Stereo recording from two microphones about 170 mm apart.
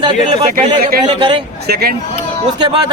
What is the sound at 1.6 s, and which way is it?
Speech, 70° right (ahead or behind).